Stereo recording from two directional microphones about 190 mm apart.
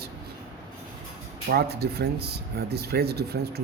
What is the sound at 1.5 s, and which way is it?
Speech, 55° right (ahead or behind).